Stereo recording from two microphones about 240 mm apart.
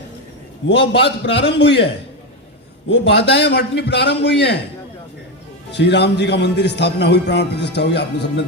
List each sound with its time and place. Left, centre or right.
0.7 s a man's voice: left
2.9 s a man's voice: left
5.7 s a man's voice: left